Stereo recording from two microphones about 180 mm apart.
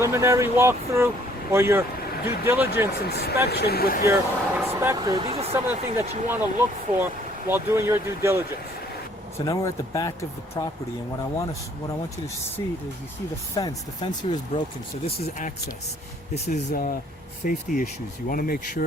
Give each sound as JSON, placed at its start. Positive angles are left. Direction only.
{"t": 0.0, "sound": "speech", "side_deg": -15}
{"t": 3.1, "sound": "speech", "side_deg": 60}
{"t": 4.0, "sound": "speech", "side_deg": -15}
{"t": 5.1, "sound": "speech", "side_deg": -35}
{"t": 5.5, "sound": "speech", "side_deg": -15}
{"t": 9.5, "sound": "speech", "side_deg": 20}
{"t": 13.5, "sound": "speech", "side_deg": 20}
{"t": 16.3, "sound": "speech", "side_deg": 40}